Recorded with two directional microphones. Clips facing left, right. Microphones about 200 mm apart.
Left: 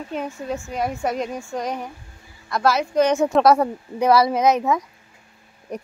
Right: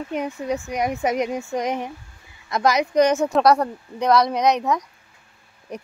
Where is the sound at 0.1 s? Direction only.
15° right (ahead or behind).